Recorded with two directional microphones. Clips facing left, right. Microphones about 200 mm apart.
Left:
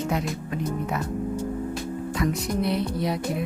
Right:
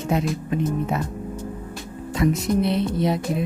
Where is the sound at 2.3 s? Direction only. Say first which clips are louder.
Right 4 dB; 25° right (ahead or behind).